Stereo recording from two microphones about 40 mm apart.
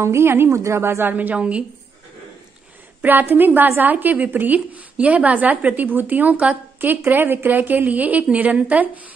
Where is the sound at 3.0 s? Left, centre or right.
Right.